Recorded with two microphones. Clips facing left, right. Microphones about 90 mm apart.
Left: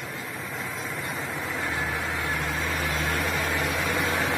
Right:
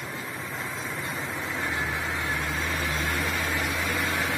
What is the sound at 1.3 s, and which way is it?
Vehicle, 10° left (ahead or behind).